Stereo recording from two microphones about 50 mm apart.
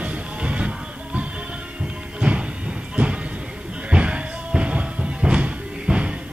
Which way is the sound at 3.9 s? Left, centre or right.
Right.